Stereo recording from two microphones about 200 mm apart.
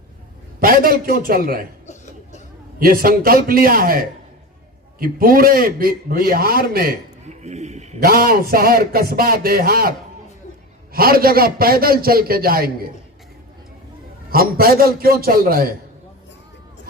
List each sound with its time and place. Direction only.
0.6 s a man's voice: 45° right (ahead or behind)
2.7 s a man's voice: 45° right (ahead or behind)
7.3 s a sound: 35° right (ahead or behind)
8.0 s a man's voice: 45° right (ahead or behind)
10.9 s a man's voice: 50° right (ahead or behind)
14.3 s a man's voice: 45° right (ahead or behind)